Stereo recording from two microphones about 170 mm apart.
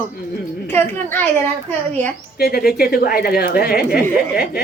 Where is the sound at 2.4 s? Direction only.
65° left (ahead or behind).